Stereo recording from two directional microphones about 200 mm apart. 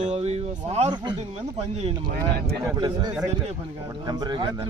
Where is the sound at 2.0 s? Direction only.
50° right (ahead or behind).